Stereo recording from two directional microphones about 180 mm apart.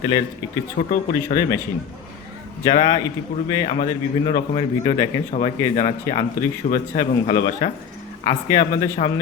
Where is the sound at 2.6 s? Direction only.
20° left (ahead or behind).